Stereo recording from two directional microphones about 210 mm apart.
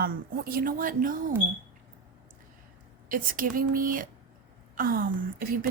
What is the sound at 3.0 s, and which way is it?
Speech, 40° right (ahead or behind).